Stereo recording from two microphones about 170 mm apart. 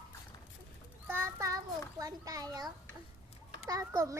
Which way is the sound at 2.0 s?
20° right (ahead or behind).